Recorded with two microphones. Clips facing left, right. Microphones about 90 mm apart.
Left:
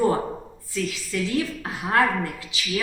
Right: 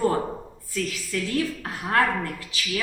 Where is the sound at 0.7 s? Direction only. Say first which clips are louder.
Left 1 dB; 20° left (ahead or behind).